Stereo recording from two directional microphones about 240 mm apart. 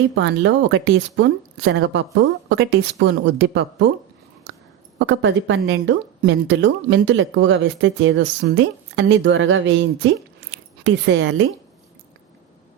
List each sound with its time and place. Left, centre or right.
0.2 s speech: right
4.9 s speech: right